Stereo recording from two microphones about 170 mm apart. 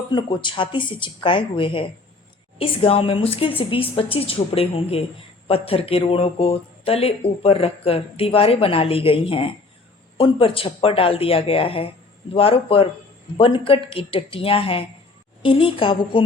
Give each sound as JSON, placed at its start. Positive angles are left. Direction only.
{"t": 0.1, "sound": "speech", "side_deg": 30}